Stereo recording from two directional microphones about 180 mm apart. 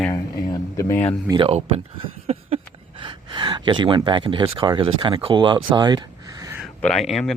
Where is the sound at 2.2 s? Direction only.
35° right (ahead or behind).